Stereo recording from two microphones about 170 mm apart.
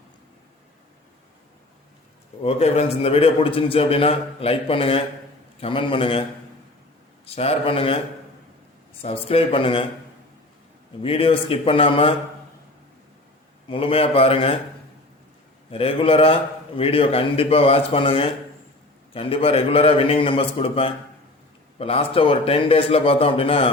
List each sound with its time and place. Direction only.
2.4 s a man's voice: 35° left (ahead or behind)
7.3 s a man's voice: 35° left (ahead or behind)
9.0 s a man's voice: 35° left (ahead or behind)
11.0 s a man's voice: 35° left (ahead or behind)
13.7 s a man's voice: 30° left (ahead or behind)
15.7 s a man's voice: 35° left (ahead or behind)